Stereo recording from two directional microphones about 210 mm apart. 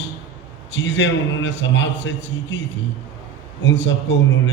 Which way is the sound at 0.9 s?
60° left (ahead or behind).